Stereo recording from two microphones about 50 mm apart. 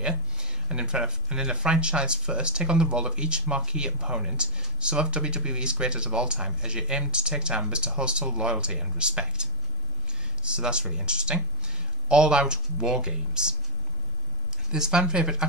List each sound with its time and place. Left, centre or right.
0.0 s speech: centre
14.7 s speech: centre